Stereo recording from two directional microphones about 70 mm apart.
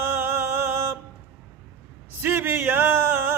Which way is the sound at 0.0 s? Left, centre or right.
Right.